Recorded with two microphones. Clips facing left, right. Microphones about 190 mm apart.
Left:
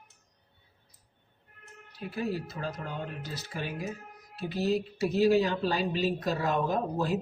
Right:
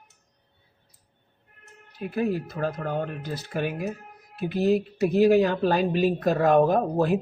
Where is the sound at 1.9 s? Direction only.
50° right (ahead or behind).